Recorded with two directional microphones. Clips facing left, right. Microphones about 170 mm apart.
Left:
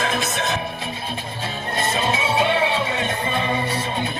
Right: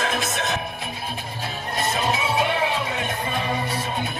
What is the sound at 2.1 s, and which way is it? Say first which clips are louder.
Music: left 2 dB; 25° left (ahead or behind).